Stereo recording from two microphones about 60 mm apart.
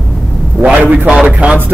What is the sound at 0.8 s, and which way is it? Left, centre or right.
Speech, right.